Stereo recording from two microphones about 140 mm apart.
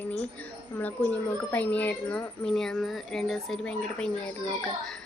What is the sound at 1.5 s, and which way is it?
Speech, 10° left (ahead or behind).